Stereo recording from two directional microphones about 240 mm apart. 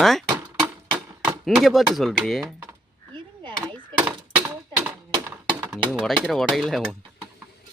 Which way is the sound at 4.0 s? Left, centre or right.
Centre.